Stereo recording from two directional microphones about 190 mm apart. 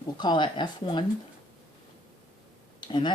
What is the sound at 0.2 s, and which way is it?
Speech, 25° left (ahead or behind).